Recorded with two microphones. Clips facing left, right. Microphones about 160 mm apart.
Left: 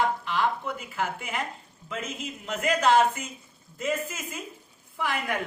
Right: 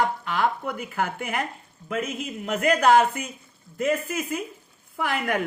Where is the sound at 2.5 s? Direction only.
55° right (ahead or behind).